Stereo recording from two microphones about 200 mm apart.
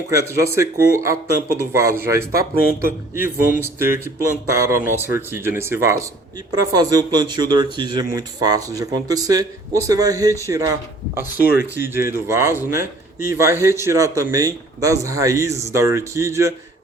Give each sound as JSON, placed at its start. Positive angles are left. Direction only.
{"t": 0.1, "sound": "speech", "side_deg": -15}
{"t": 3.6, "sound": "speech", "side_deg": -10}